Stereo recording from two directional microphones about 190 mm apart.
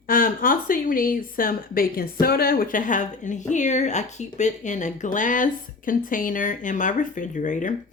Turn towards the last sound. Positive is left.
turn(degrees=40)  # may be behind; listen again after turning